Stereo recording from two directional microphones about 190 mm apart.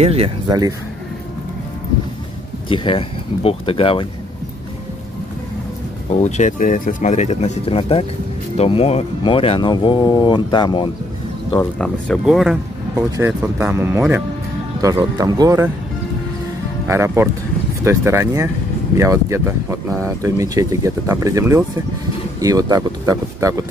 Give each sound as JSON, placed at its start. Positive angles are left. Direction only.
{"t": 0.0, "sound": "speech", "side_deg": -30}
{"t": 0.5, "sound": "speech", "side_deg": -20}
{"t": 2.7, "sound": "speech", "side_deg": 25}
{"t": 6.2, "sound": "speech", "side_deg": 40}
{"t": 11.8, "sound": "speech", "side_deg": 0}
{"t": 13.2, "sound": "speech", "side_deg": -10}
{"t": 16.8, "sound": "speech", "side_deg": -15}